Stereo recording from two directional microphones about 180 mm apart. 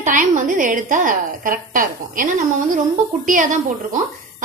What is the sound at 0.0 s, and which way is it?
A woman's voice, 45° right (ahead or behind).